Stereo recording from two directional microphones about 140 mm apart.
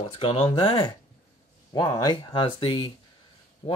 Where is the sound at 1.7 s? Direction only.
30° left (ahead or behind).